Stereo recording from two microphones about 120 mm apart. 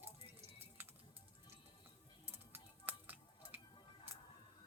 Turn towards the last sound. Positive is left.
turn(degrees=-15)  # may be behind; listen again after turning